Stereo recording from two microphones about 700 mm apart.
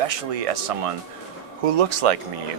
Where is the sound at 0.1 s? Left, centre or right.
Right.